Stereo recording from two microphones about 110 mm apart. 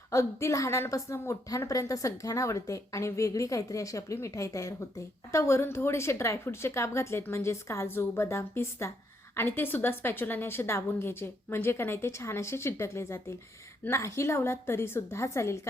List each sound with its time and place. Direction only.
0.1 s a woman's voice: 25° left (ahead or behind)